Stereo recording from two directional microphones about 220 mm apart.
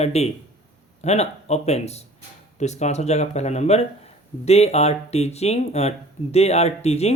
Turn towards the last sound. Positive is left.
turn(degrees=30)  # may be behind; listen again after turning